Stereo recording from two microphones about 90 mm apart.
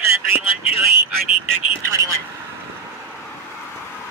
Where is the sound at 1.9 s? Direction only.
35° right (ahead or behind).